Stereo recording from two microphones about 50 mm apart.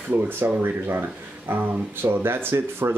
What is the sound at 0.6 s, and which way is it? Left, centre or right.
Speech, right.